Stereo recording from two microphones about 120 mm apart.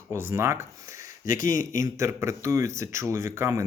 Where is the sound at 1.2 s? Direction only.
90° left.